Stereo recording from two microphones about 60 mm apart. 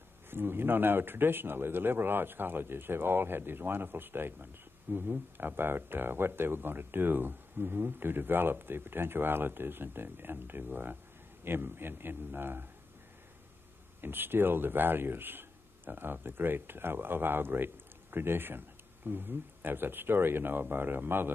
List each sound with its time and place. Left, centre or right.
0.3 s speech: right
14.0 s speech: right